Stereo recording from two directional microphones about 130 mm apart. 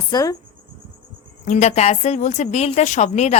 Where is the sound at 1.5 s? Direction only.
60° left (ahead or behind).